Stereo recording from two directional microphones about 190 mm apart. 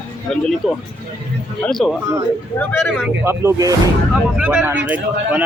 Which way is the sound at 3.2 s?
15° right (ahead or behind).